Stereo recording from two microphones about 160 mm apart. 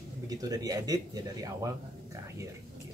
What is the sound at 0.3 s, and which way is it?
Speech, 25° right (ahead or behind).